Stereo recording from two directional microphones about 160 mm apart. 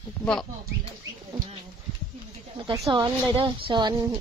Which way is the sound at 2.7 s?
30° right (ahead or behind).